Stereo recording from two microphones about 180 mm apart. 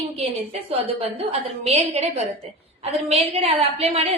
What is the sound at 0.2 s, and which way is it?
A woman's voice, 35° right (ahead or behind).